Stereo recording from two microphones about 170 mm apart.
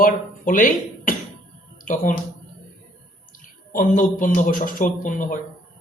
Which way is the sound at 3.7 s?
50° left (ahead or behind).